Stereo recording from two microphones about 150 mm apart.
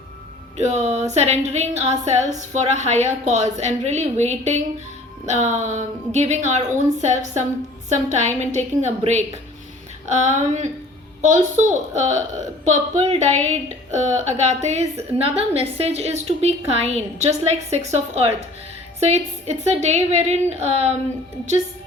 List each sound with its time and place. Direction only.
0.5 s a woman's voice: 50° right (ahead or behind)